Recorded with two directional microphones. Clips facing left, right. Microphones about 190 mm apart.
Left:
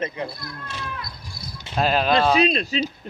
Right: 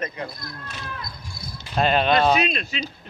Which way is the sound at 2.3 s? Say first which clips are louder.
Left 3 dB; 35° left (ahead or behind).